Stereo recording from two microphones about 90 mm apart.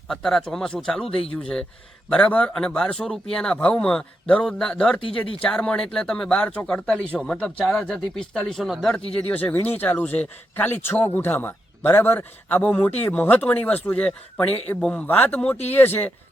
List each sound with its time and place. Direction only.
0.1 s speech: 5° left (ahead or behind)
4.9 s speech: 90° left
5.4 s speech: 10° left (ahead or behind)
9.1 s speech: 20° left (ahead or behind)